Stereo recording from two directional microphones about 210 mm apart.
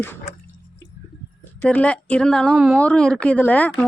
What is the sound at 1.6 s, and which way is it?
A woman's voice, 5° left (ahead or behind).